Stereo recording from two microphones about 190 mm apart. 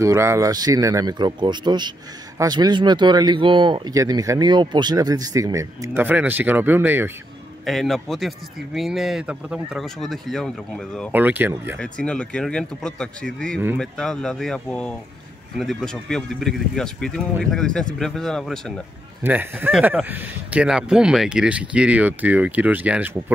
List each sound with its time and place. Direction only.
0.0 s speech: 15° right (ahead or behind)
7.6 s speech: centre (ahead or behind)
11.1 s speech: 10° right (ahead or behind)
11.8 s speech: 5° left (ahead or behind)
19.2 s speech: 10° right (ahead or behind)